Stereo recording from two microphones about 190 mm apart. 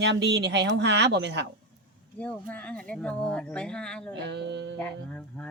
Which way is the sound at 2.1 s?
10° left (ahead or behind).